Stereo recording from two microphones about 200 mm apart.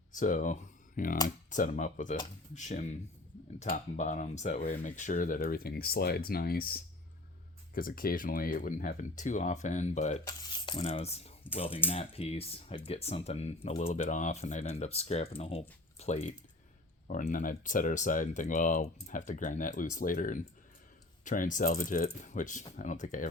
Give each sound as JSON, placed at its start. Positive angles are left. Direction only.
{"t": 0.1, "sound": "speech", "side_deg": 40}
{"t": 10.2, "sound": "a sound", "side_deg": 25}
{"t": 11.9, "sound": "speech", "side_deg": 30}